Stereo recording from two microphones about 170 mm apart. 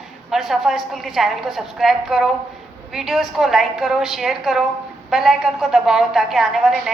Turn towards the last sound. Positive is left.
turn(degrees=0)  # may be behind; listen again after turning